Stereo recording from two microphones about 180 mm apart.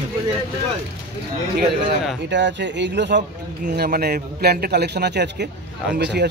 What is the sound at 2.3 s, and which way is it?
Speech, 75° right (ahead or behind).